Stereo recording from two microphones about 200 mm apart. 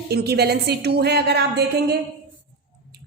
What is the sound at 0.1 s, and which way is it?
A woman's voice, 55° right (ahead or behind).